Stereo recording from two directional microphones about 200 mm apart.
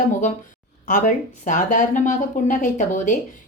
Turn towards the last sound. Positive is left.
turn(degrees=40)  # may be behind; listen again after turning